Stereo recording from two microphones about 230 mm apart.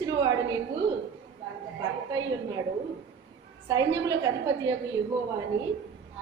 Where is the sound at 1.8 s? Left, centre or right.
Centre.